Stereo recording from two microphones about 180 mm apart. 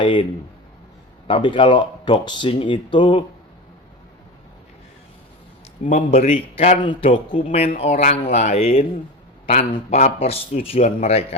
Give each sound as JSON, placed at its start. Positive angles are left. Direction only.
{"t": 0.0, "sound": "speech", "side_deg": 25}
{"t": 1.3, "sound": "speech", "side_deg": 25}
{"t": 5.8, "sound": "a man's voice", "side_deg": 35}